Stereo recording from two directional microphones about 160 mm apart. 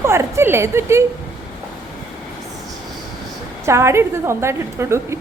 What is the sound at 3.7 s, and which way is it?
A woman's voice, 15° right (ahead or behind).